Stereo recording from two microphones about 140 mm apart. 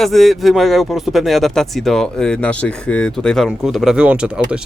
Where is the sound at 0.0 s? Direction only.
Centre (ahead or behind).